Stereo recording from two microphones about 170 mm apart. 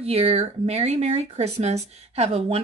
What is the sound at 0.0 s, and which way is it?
A woman's voice, 35° right (ahead or behind).